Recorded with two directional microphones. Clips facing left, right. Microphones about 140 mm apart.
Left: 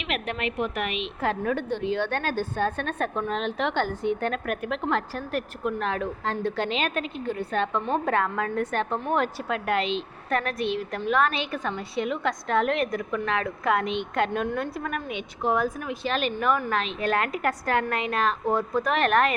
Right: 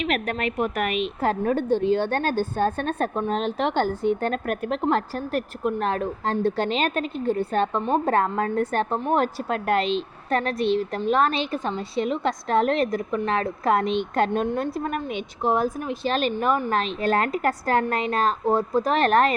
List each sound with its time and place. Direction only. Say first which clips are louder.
0.0 s a woman's voice: right 4 dB; 45° right (ahead or behind)